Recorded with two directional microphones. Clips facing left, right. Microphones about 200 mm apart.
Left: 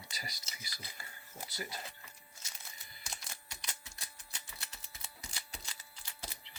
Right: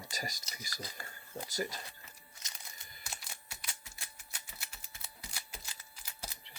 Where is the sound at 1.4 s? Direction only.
90° right.